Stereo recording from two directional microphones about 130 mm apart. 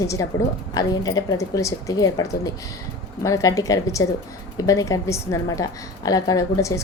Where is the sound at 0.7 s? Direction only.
30° left (ahead or behind).